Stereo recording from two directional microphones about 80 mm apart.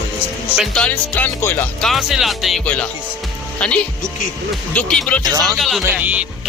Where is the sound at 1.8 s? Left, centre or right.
Centre.